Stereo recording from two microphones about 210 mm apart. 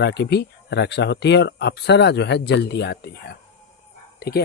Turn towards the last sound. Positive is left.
turn(degrees=45)  # may be behind; listen again after turning